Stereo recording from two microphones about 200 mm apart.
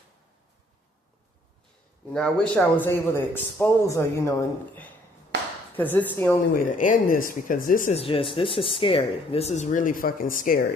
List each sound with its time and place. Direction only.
2.1 s a man's voice: 5° left (ahead or behind)
6.7 s speech: 40° left (ahead or behind)